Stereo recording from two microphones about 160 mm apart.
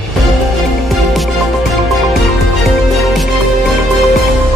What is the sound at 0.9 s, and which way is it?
Music, centre (ahead or behind).